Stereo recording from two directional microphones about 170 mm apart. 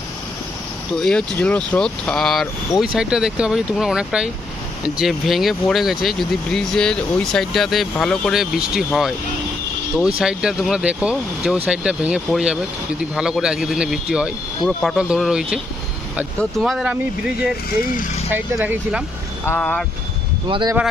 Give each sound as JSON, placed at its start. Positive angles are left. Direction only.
{"t": 1.0, "sound": "speech", "side_deg": 5}
{"t": 19.4, "sound": "speech", "side_deg": 10}
{"t": 20.4, "sound": "speech", "side_deg": -30}